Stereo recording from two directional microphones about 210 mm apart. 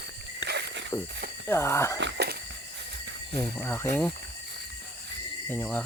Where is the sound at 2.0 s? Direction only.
50° right (ahead or behind).